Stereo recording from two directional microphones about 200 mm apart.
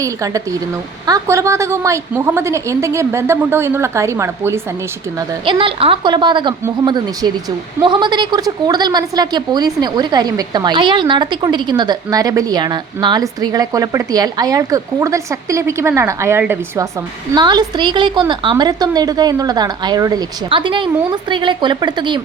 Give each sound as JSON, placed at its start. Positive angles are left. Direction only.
{"t": 0.0, "sound": "a woman's voice", "side_deg": -15}
{"t": 5.5, "sound": "a woman's voice", "side_deg": -25}